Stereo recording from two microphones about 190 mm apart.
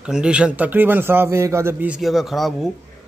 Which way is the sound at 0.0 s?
5° right (ahead or behind).